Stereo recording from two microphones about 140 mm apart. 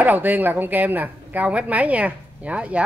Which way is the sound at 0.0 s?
10° right (ahead or behind).